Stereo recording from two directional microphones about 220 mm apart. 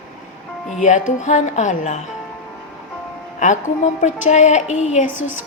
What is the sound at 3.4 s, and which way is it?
A woman's voice, 35° left (ahead or behind).